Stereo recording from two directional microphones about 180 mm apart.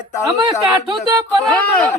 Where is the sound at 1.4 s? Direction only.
5° left (ahead or behind).